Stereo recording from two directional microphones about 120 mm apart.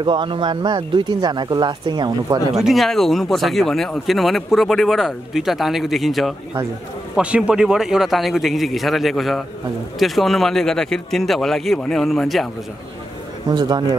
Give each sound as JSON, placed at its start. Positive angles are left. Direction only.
{"t": 0.0, "sound": "speech", "side_deg": -40}
{"t": 2.5, "sound": "speech", "side_deg": 0}
{"t": 13.5, "sound": "speech", "side_deg": -35}